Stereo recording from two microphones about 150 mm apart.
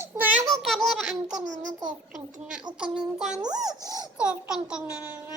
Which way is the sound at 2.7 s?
5° right (ahead or behind).